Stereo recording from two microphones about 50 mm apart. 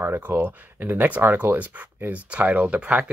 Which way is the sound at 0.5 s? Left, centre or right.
Right.